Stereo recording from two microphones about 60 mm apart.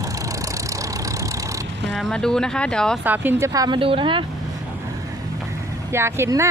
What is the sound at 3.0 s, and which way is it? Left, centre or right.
Speech, right.